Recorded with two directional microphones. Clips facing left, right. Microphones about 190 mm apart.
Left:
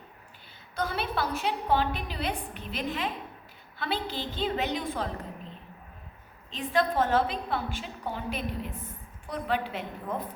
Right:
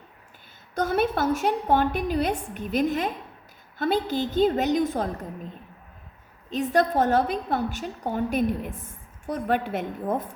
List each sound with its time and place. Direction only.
0.8 s a woman's voice: 45° right (ahead or behind)
6.5 s a woman's voice: 45° right (ahead or behind)